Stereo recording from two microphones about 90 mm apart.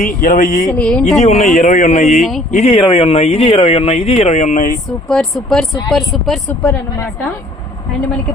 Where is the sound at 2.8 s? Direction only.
90° left.